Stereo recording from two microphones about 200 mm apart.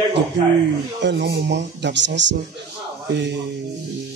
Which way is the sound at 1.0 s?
55° right (ahead or behind).